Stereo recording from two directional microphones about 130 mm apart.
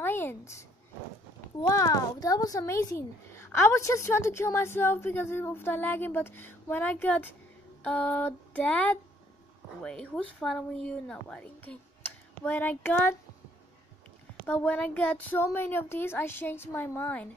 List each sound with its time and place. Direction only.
0.0 s a sound: 15° left (ahead or behind)
1.6 s a child's voice: 25° left (ahead or behind)
14.4 s a woman's voice: 10° left (ahead or behind)